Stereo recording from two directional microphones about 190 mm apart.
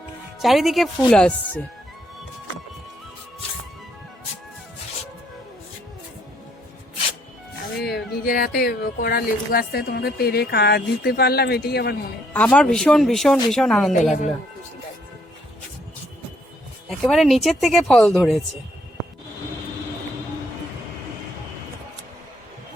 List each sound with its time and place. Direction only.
0.3 s speech: centre (ahead or behind)
7.9 s speech: 55° left (ahead or behind)
12.3 s speech: 5° left (ahead or behind)
16.9 s speech: centre (ahead or behind)